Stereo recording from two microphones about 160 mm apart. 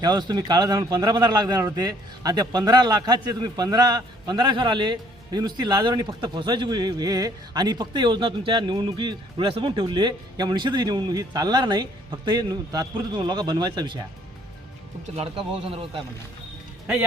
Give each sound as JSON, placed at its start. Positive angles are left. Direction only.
{"t": 0.0, "sound": "a man's voice", "side_deg": -25}
{"t": 15.1, "sound": "speech", "side_deg": -40}